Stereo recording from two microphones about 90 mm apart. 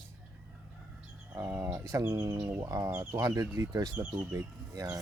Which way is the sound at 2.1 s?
50° right (ahead or behind).